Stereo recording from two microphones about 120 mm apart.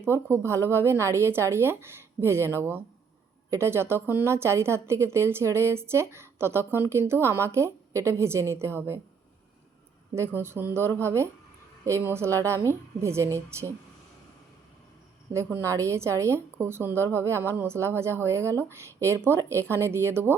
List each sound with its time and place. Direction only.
0.3 s a woman's voice: 20° right (ahead or behind)
10.4 s a woman's voice: 20° right (ahead or behind)
15.6 s a woman's voice: 25° right (ahead or behind)